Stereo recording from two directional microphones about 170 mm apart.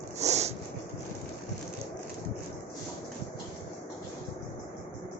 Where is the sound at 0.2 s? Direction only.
40° right (ahead or behind).